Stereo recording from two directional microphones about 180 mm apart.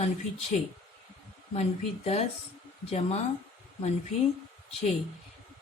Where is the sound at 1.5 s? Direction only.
35° left (ahead or behind).